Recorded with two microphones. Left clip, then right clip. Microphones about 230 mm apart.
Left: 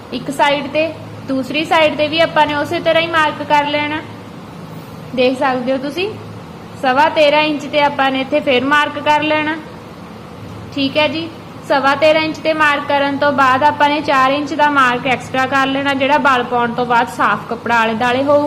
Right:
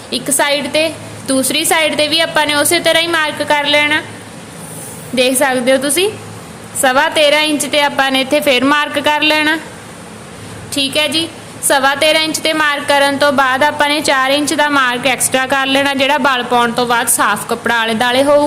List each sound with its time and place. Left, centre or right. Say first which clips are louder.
0.1 s a woman's voice: even; right
5.1 s a woman's voice: right 2 dB; right
10.9 s a woman's voice: left 1 dB; right